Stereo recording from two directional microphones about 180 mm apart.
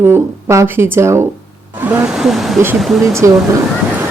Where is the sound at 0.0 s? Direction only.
15° right (ahead or behind).